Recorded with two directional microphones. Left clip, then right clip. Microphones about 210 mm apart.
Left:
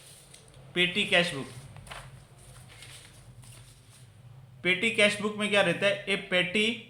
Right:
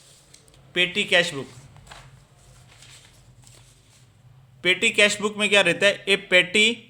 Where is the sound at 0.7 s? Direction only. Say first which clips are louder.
Right 5 dB; 40° right (ahead or behind).